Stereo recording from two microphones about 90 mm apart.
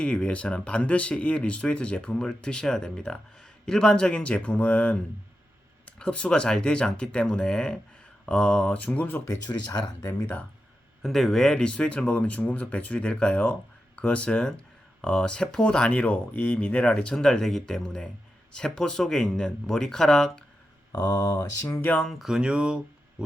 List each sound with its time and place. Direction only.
0.0 s speech: 10° left (ahead or behind)
9.5 s speech: 50° left (ahead or behind)
11.0 s speech: centre (ahead or behind)
20.9 s speech: 50° left (ahead or behind)
21.6 s speech: 25° left (ahead or behind)
22.2 s speech: 10° right (ahead or behind)